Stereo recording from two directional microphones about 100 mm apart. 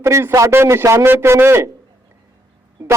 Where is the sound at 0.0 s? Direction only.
30° right (ahead or behind).